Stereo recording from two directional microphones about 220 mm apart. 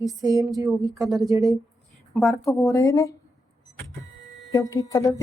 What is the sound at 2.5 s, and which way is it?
Speech, 15° left (ahead or behind).